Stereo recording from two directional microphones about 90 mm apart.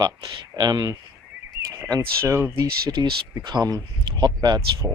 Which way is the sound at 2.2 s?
30° right (ahead or behind).